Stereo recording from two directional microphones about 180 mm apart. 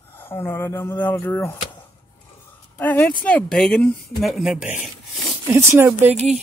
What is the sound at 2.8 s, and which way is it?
Speech, 10° left (ahead or behind).